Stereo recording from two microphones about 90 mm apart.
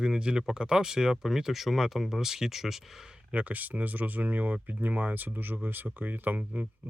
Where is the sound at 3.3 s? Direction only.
20° right (ahead or behind).